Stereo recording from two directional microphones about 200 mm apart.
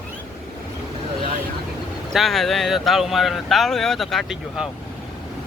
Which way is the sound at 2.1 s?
Centre (ahead or behind).